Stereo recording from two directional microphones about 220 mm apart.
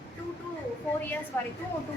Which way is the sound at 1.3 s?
10° left (ahead or behind).